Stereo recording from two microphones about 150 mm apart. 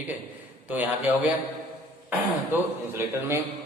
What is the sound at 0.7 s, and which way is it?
A man's voice, 10° right (ahead or behind).